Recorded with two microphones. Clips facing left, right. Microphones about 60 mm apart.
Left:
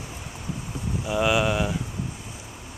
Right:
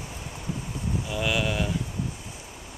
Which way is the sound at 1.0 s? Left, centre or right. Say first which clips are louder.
Left 6 dB; centre.